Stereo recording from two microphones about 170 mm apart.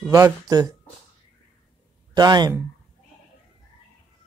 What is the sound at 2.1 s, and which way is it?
Speech, 25° right (ahead or behind).